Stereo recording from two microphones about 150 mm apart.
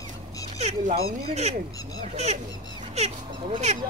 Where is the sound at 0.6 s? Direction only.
50° right (ahead or behind).